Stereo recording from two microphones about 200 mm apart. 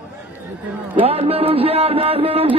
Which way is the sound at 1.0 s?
30° right (ahead or behind).